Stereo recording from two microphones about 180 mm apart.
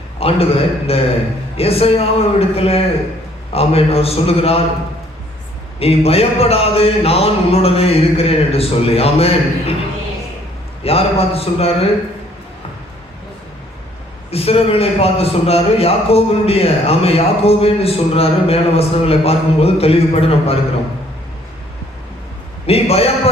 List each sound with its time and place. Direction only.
0.2 s a man's voice: 35° left (ahead or behind)
5.8 s a man's voice: 35° left (ahead or behind)
10.8 s a man's voice: 35° left (ahead or behind)
14.3 s a man's voice: 35° left (ahead or behind)
22.6 s a man's voice: 35° left (ahead or behind)